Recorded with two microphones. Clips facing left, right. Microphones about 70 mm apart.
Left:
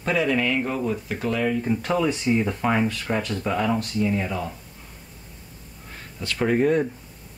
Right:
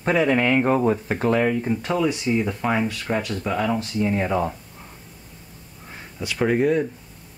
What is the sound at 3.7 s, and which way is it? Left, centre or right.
Speech, right.